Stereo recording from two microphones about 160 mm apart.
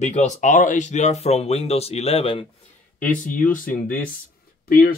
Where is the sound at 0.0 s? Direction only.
45° left (ahead or behind).